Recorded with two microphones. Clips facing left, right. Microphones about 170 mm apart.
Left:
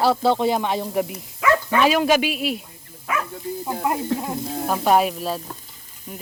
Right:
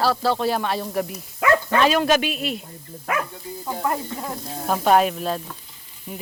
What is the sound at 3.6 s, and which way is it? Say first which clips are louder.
Speech: even; 15° left (ahead or behind).